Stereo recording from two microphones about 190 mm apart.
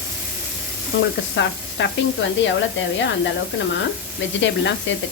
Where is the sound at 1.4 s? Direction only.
75° left (ahead or behind).